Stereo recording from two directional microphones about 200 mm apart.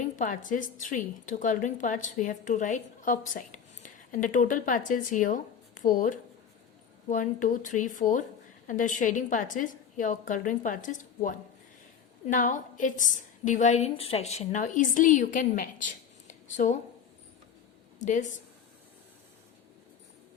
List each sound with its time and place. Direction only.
0.0 s a woman's voice: 40° left (ahead or behind)
18.0 s a woman's voice: 40° left (ahead or behind)